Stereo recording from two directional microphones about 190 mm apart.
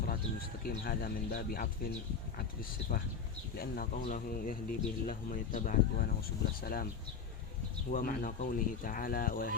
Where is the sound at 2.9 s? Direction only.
50° left (ahead or behind).